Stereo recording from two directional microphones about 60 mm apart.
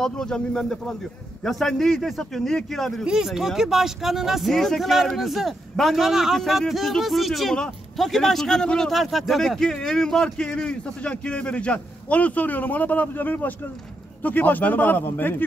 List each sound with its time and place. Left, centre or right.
0.0 s speech: centre
3.1 s a man's voice: centre; by 15.4 s left